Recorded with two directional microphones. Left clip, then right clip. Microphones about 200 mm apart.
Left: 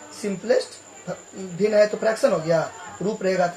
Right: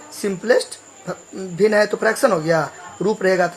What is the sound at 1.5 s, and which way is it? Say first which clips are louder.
Speech: right 2 dB; 50° right (ahead or behind).